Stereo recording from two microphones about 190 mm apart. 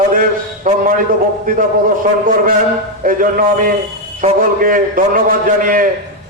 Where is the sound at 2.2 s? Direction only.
45° right (ahead or behind).